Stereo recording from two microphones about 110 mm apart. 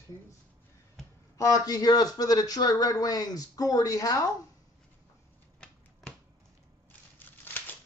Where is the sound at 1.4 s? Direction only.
30° left (ahead or behind).